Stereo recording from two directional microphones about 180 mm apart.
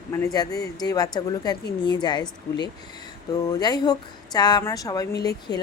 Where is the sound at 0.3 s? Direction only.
20° left (ahead or behind).